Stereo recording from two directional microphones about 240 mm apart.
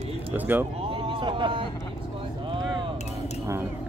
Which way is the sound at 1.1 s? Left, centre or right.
Right.